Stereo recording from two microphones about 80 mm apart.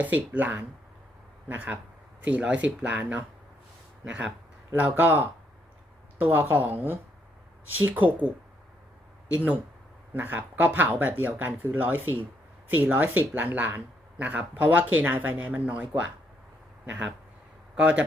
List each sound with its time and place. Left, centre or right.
0.0 s speech: right
4.7 s speech: right
9.3 s a man's voice: centre